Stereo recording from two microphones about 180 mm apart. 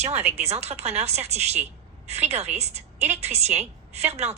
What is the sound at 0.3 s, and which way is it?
A woman's voice, 35° right (ahead or behind).